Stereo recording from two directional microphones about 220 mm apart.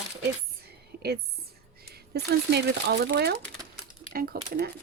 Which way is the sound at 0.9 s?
45° right (ahead or behind).